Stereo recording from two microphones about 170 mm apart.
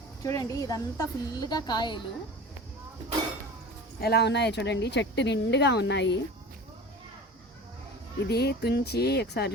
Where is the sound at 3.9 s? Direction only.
70° left (ahead or behind); by 6.2 s 90° left.